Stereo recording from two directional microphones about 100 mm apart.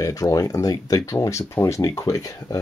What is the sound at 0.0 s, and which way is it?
Speech, 35° left (ahead or behind).